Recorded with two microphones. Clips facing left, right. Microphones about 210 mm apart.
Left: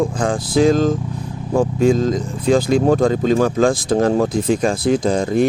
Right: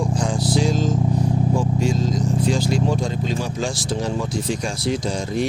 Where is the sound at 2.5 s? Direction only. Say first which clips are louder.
Left 7 dB; 55° left (ahead or behind).